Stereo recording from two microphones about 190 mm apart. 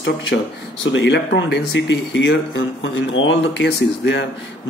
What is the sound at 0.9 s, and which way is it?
Speech, 65° left (ahead or behind).